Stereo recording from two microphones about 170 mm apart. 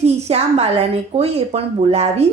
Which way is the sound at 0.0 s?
40° right (ahead or behind).